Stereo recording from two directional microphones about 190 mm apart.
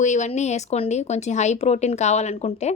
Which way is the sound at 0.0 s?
40° left (ahead or behind).